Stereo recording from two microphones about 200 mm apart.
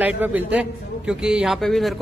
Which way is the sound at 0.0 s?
5° right (ahead or behind).